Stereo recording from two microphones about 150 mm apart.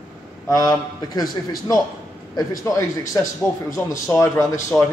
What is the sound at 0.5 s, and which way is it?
Speech, 25° left (ahead or behind).